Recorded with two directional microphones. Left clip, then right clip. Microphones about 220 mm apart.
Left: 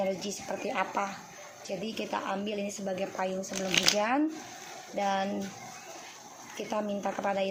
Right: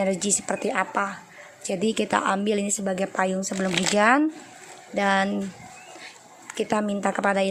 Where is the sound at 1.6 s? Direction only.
30° right (ahead or behind).